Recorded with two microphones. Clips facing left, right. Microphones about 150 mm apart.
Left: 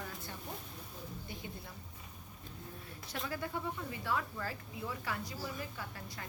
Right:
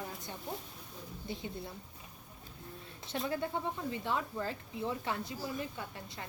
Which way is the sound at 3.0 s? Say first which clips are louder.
Right 5 dB; 25° right (ahead or behind).